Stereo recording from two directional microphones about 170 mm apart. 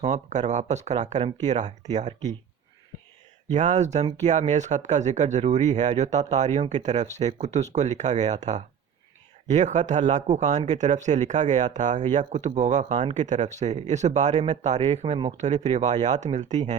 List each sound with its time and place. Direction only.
0.0 s speech: 45° right (ahead or behind)
3.5 s speech: 45° right (ahead or behind)